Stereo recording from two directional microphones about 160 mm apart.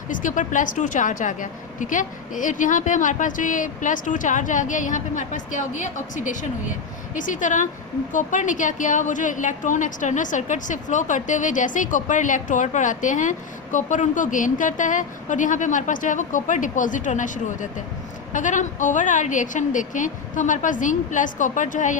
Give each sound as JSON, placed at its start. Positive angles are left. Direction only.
{"t": 0.1, "sound": "a woman's voice", "side_deg": 55}